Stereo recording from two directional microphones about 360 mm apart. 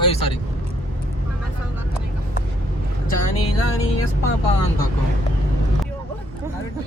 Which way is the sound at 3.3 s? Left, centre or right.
Left.